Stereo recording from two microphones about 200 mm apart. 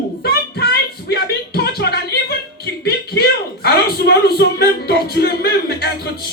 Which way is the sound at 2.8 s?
50° left (ahead or behind).